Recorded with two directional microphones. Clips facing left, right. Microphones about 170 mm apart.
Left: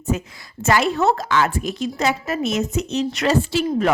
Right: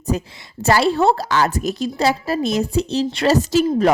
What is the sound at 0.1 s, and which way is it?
A woman's voice, 35° right (ahead or behind).